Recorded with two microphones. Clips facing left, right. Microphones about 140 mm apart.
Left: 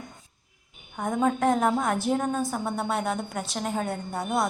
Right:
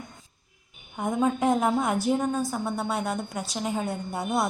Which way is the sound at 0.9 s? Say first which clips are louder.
Even; 5° right (ahead or behind).